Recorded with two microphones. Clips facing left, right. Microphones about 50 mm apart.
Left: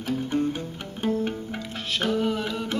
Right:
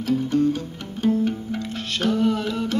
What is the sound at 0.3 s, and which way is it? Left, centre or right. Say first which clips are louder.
Music: right 5 dB; left.